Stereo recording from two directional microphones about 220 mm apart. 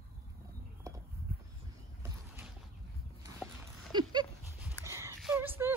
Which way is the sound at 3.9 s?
20° right (ahead or behind).